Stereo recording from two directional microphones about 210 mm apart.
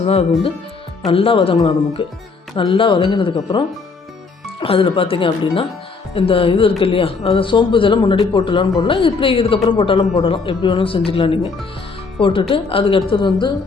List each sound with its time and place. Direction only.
0.0 s speech: 30° left (ahead or behind)
4.6 s speech: 25° left (ahead or behind)